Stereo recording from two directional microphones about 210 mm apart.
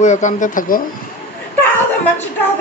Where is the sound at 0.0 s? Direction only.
35° left (ahead or behind).